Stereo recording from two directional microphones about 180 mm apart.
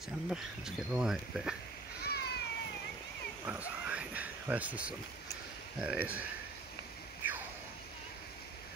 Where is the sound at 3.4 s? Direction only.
10° right (ahead or behind).